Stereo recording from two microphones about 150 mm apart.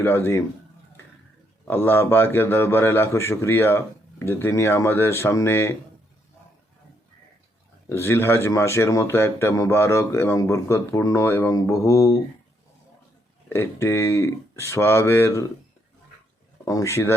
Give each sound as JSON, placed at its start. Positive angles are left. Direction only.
{"t": 0.0, "sound": "speech", "side_deg": 15}
{"t": 1.6, "sound": "speech", "side_deg": 15}
{"t": 7.9, "sound": "speech", "side_deg": 15}
{"t": 13.5, "sound": "speech", "side_deg": 15}
{"t": 16.6, "sound": "speech", "side_deg": 20}